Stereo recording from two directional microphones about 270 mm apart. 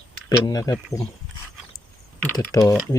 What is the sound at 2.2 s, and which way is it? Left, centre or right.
Typing, centre.